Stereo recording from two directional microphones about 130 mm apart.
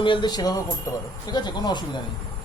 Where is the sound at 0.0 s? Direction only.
40° left (ahead or behind).